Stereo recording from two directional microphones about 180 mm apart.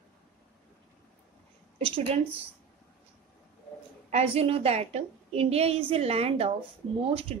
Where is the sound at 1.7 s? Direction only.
30° right (ahead or behind).